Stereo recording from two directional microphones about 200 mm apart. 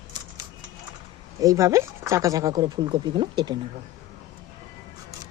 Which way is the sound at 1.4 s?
15° right (ahead or behind).